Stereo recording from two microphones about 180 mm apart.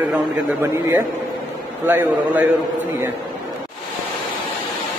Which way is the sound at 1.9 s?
10° right (ahead or behind).